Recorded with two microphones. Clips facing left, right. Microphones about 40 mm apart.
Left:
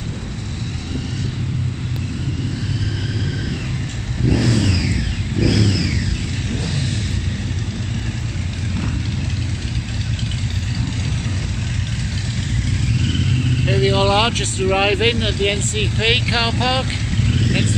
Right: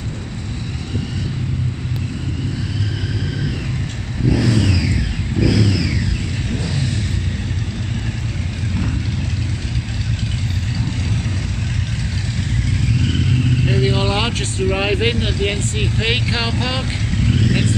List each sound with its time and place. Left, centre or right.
4.3 s vehicle: centre
13.0 s vehicle: centre
13.8 s vehicle: centre
14.6 s speech: centre
17.2 s vehicle: centre